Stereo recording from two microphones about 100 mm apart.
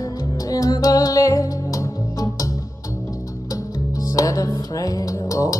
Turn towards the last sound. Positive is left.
turn(degrees=30)  # may be behind; listen again after turning